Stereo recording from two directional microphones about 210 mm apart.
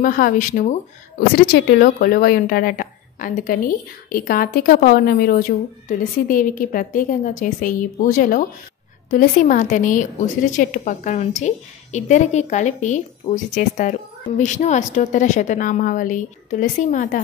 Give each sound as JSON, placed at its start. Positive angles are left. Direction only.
{"t": 0.0, "sound": "speech", "side_deg": 40}